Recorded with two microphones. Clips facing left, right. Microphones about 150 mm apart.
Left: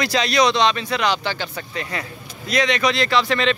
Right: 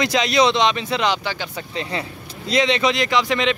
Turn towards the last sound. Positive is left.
turn(degrees=-15)  # may be behind; listen again after turning